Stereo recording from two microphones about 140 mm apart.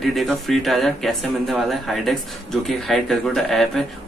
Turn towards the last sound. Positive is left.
turn(degrees=5)  # may be behind; listen again after turning